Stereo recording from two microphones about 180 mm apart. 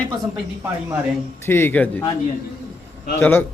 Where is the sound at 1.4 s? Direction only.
15° left (ahead or behind).